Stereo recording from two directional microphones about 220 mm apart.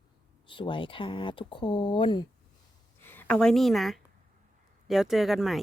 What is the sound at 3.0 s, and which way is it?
A woman's voice, 10° left (ahead or behind).